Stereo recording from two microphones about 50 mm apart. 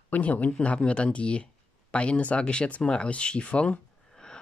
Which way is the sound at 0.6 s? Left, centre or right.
Left.